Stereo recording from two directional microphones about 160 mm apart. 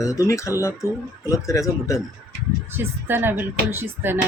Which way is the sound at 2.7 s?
15° right (ahead or behind).